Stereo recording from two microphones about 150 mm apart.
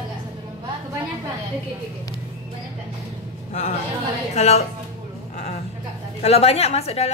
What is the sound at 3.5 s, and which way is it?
A woman's voice, 50° left (ahead or behind).